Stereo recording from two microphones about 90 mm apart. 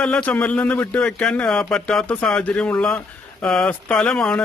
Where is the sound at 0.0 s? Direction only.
15° left (ahead or behind).